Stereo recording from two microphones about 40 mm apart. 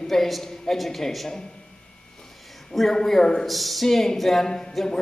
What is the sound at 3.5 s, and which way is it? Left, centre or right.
A woman's voice, centre.